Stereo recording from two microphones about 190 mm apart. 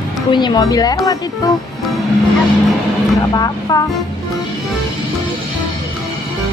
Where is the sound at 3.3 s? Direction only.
20° left (ahead or behind).